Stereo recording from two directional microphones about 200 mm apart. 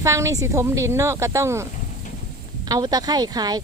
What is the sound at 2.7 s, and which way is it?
Speech, 20° right (ahead or behind).